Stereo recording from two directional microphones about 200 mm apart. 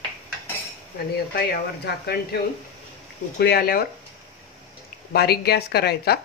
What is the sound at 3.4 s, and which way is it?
Speech, 50° left (ahead or behind).